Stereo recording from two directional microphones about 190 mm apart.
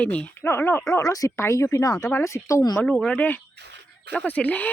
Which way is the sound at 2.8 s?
5° left (ahead or behind).